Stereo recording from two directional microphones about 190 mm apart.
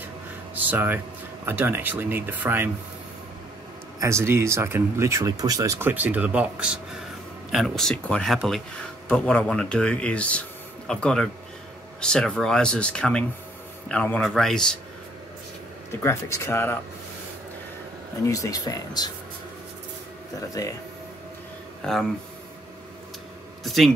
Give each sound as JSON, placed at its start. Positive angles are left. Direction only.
{"t": 0.6, "sound": "speech", "side_deg": -10}
{"t": 4.0, "sound": "speech", "side_deg": -15}
{"t": 15.9, "sound": "speech", "side_deg": 15}
{"t": 18.2, "sound": "speech", "side_deg": 15}
{"t": 21.8, "sound": "speech", "side_deg": 5}
{"t": 23.6, "sound": "speech", "side_deg": 0}